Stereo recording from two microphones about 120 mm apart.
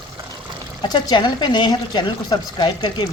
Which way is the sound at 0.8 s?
35° left (ahead or behind).